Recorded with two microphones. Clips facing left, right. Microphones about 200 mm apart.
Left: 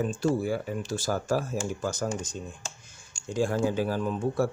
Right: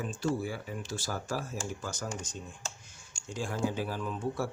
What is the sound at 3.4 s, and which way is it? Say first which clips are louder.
Speech: left 7 dB; 45° left (ahead or behind).